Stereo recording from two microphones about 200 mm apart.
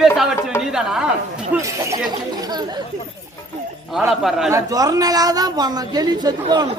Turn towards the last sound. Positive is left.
turn(degrees=-20)  # may be behind; listen again after turning